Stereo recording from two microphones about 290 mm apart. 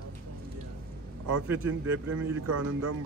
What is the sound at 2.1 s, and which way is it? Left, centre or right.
Speech, right.